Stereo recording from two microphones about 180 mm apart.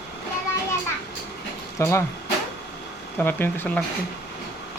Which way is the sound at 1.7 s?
15° left (ahead or behind).